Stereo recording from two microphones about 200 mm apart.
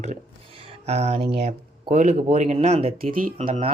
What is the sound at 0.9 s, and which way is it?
Speech, 30° right (ahead or behind).